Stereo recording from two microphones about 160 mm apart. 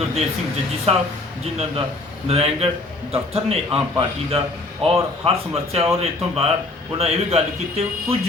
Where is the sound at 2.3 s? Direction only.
40° right (ahead or behind).